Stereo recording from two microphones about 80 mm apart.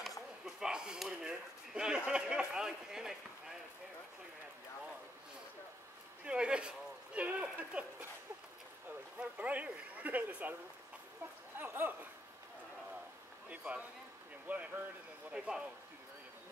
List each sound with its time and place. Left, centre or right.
0.5 s speech: centre
6.2 s speech: centre
9.2 s speech: centre
11.5 s speech: right
13.5 s speech: centre